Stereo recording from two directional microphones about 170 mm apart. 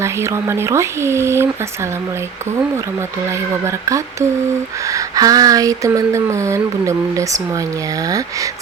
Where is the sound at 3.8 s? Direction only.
20° right (ahead or behind).